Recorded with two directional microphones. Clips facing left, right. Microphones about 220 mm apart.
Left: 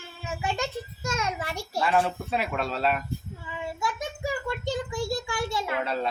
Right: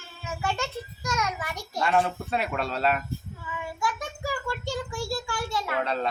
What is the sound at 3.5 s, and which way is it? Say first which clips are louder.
Child singing: even; 25° left (ahead or behind).